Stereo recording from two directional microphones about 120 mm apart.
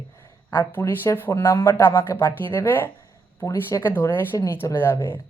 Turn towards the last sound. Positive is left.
turn(degrees=20)  # may be behind; listen again after turning